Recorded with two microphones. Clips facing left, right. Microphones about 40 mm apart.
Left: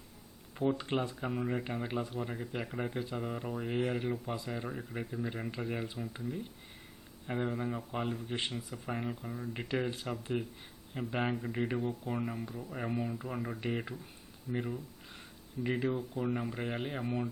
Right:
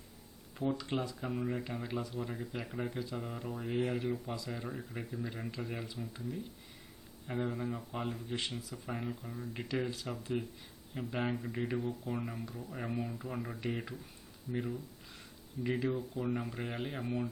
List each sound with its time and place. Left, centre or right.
0.5 s speech: left
0.8 s speech: left
1.1 s speech: centre
1.6 s speech: left; by 2.9 s centre
2.9 s speech: left
3.2 s speech: centre
7.3 s speech: centre
8.3 s speech: left
8.5 s speech: centre